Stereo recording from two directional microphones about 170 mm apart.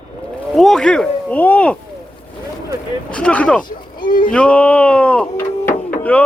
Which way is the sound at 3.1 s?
5° left (ahead or behind).